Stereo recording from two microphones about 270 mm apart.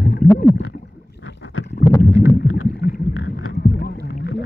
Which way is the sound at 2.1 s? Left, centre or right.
Left.